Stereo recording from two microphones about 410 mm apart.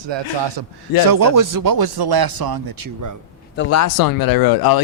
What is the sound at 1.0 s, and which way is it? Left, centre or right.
Speech, right.